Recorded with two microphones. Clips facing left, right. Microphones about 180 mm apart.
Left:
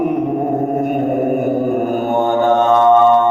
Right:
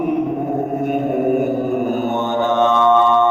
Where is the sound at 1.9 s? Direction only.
50° left (ahead or behind).